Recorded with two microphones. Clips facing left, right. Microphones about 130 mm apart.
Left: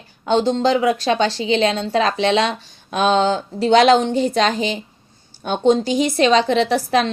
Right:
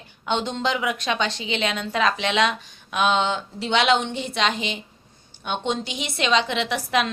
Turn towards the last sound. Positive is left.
turn(degrees=35)  # may be behind; listen again after turning